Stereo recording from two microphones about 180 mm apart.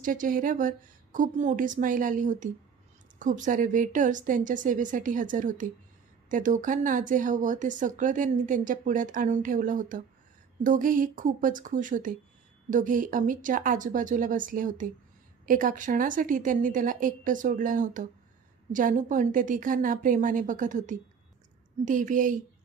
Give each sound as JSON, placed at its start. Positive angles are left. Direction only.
{"t": 0.0, "sound": "speech", "side_deg": -50}